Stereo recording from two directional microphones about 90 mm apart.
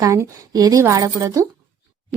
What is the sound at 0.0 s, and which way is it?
Speech, 35° right (ahead or behind).